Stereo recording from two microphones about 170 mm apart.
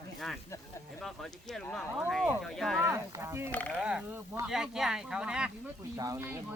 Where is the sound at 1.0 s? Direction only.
Centre (ahead or behind).